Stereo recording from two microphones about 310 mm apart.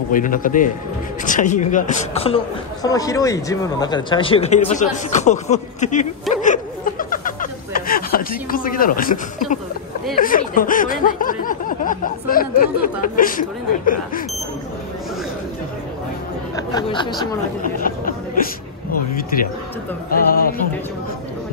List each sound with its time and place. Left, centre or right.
0.1 s a man's voice: left
6.4 s a sound: left
10.1 s a man's voice: left
16.5 s speech: centre
17.7 s chatter: left
20.1 s a man's voice: left